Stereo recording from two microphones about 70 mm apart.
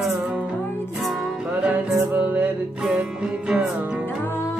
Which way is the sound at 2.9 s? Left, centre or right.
Centre.